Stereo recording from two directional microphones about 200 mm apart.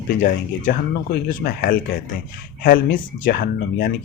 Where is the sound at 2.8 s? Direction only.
65° left (ahead or behind).